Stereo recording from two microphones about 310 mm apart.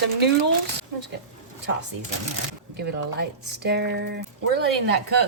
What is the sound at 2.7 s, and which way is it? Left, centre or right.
Speech, right.